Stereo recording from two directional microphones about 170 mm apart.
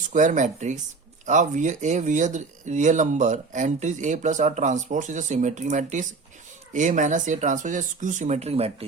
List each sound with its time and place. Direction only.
0.1 s speech: 45° right (ahead or behind)